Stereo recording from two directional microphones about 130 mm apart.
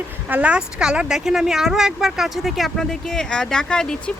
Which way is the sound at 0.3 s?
10° right (ahead or behind).